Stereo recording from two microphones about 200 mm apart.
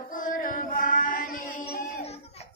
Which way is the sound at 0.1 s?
40° left (ahead or behind).